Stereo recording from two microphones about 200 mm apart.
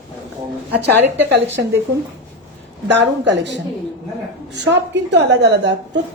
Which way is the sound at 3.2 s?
60° right (ahead or behind).